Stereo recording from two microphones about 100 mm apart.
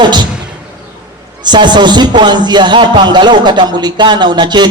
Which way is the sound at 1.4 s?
50° right (ahead or behind).